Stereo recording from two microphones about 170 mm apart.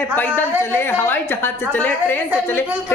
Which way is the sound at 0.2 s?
10° left (ahead or behind).